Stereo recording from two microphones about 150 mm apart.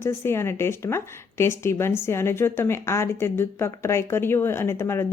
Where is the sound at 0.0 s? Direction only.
15° left (ahead or behind).